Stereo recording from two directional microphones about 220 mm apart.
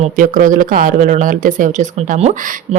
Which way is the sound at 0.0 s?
35° right (ahead or behind).